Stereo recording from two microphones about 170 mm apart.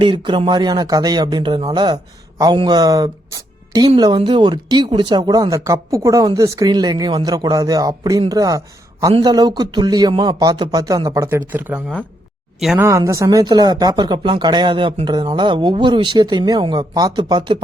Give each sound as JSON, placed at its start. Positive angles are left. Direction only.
{"t": 0.0, "sound": "speech", "side_deg": -30}